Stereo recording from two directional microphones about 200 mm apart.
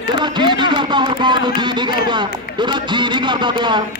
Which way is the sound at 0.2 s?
25° right (ahead or behind).